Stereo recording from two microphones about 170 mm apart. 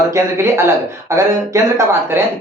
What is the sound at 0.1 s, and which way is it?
Speech, 15° right (ahead or behind).